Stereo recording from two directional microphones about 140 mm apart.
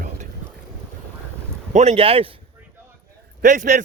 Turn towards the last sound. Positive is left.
turn(degrees=-65)  # may be behind; listen again after turning